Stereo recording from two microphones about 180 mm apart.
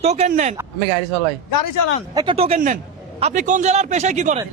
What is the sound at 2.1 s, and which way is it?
Speech, 30° right (ahead or behind).